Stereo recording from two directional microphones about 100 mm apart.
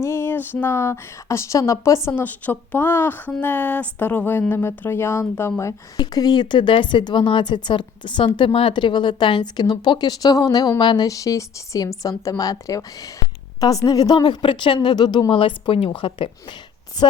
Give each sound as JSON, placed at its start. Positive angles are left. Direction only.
{"t": 0.0, "sound": "a sound", "side_deg": 25}
{"t": 0.6, "sound": "a woman's voice", "side_deg": 25}
{"t": 2.0, "sound": "a woman's voice", "side_deg": 20}
{"t": 6.0, "sound": "speech", "side_deg": 40}